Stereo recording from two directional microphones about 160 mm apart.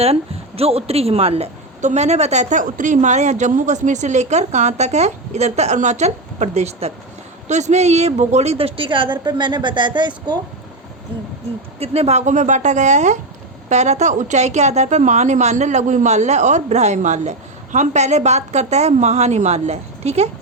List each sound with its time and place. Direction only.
0.0 s a woman's voice: 40° right (ahead or behind)
11.8 s a woman's voice: 40° right (ahead or behind)